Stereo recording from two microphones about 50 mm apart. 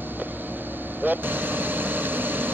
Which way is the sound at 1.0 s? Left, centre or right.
Right.